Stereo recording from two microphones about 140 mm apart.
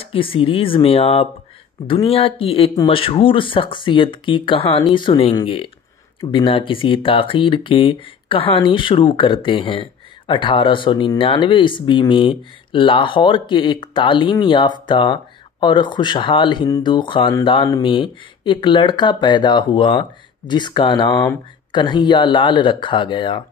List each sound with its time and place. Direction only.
0.0 s speech: 40° left (ahead or behind)
21.1 s speech: 20° left (ahead or behind)
21.7 s speech: 35° left (ahead or behind)